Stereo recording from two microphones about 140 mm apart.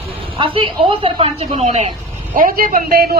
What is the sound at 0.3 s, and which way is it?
Speech, 40° right (ahead or behind).